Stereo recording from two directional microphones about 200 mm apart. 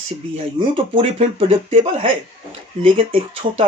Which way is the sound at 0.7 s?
30° right (ahead or behind).